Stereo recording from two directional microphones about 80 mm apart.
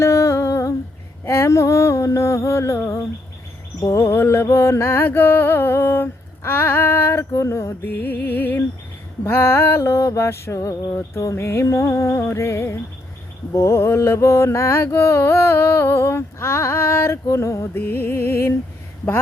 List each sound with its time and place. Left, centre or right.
0.0 s humming: left
1.2 s a sound: left
3.8 s mantra: left
4.2 s music: left
7.9 s music: left
9.2 s mantra: left
17.8 s music: left